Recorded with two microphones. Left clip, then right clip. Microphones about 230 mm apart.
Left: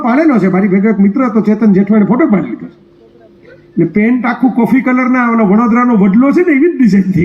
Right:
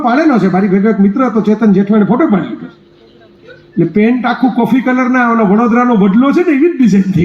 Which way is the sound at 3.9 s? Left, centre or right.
Right.